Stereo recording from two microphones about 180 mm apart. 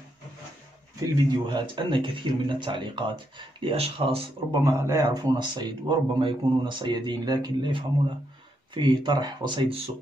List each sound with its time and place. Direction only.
1.0 s speech: 25° right (ahead or behind)
4.6 s speech: 20° right (ahead or behind)